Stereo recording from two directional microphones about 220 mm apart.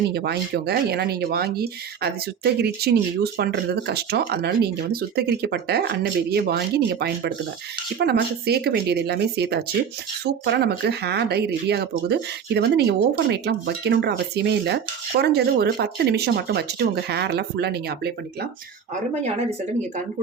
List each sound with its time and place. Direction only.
0.1 s speech: 45° right (ahead or behind)